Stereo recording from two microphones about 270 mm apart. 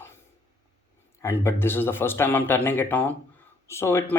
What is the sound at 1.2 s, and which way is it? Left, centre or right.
Speech, centre.